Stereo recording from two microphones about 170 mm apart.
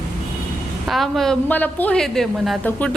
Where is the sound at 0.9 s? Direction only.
Centre (ahead or behind).